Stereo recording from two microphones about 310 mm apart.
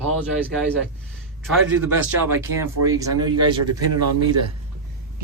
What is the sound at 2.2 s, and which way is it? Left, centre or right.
Speech, centre.